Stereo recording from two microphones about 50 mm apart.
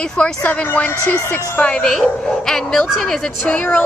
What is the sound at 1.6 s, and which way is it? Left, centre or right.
Speech, left.